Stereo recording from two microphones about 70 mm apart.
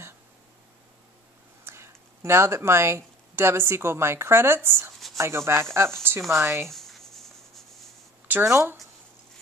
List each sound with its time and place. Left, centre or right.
1.6 s speech: right
6.7 s writing: centre
8.3 s speech: right